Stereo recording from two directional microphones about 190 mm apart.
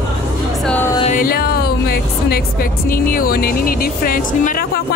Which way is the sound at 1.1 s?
50° left (ahead or behind).